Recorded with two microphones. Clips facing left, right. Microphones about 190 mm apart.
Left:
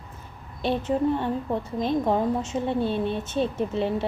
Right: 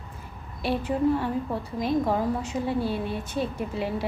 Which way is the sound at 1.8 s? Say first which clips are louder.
Left 1 dB; 25° left (ahead or behind).